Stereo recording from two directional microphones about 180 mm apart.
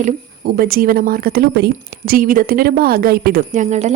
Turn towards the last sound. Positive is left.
turn(degrees=-40)  # may be behind; listen again after turning